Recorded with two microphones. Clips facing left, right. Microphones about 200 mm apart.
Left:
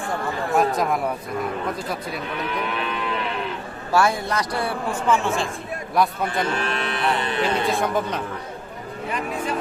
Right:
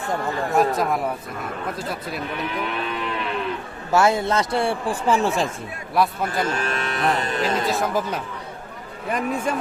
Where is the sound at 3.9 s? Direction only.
20° right (ahead or behind); by 5.5 s 40° right (ahead or behind).